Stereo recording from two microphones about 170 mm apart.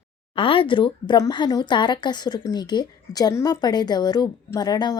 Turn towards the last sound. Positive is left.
turn(degrees=25)  # may be behind; listen again after turning